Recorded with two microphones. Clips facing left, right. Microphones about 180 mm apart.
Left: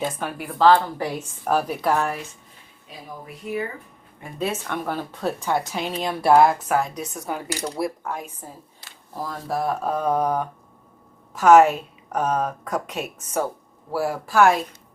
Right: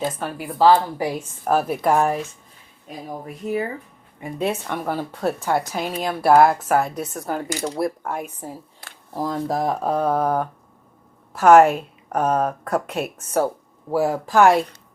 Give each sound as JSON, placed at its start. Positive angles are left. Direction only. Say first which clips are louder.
{"t": 0.2, "sound": "a woman's voice", "louder": "right 1 dB", "side_deg": 0}
{"t": 2.8, "sound": "speech", "louder": "right 6 dB", "side_deg": -45}
{"t": 4.4, "sound": "a woman's voice", "louder": "right 2 dB", "side_deg": -10}